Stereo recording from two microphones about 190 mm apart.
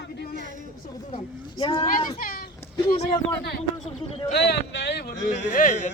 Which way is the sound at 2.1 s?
45° left (ahead or behind).